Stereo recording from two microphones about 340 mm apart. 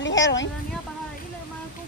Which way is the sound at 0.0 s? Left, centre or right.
Left.